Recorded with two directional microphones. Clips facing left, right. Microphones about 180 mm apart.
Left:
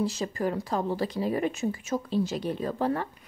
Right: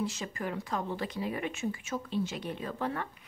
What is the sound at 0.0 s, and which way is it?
Speech, 35° left (ahead or behind).